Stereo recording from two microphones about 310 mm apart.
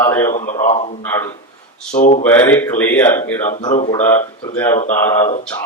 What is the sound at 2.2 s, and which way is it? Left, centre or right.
A man's voice, centre.